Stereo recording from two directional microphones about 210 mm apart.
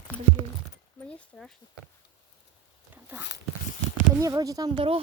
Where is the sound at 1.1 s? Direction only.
5° left (ahead or behind).